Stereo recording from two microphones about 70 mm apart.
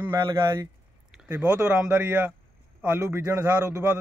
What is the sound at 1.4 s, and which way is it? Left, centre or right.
Speech, centre.